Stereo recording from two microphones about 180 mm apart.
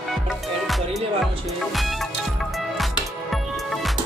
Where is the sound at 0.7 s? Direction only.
Centre (ahead or behind).